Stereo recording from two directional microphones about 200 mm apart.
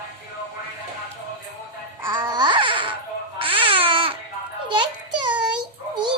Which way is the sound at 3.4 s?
25° right (ahead or behind).